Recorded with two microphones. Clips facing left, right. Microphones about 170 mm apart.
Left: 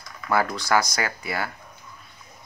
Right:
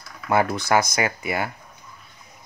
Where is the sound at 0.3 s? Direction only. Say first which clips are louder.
Right 2 dB; 20° right (ahead or behind).